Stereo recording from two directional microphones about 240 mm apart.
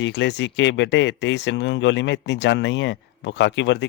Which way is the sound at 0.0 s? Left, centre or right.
Left.